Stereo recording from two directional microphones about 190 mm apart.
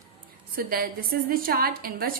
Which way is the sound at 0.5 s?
50° right (ahead or behind).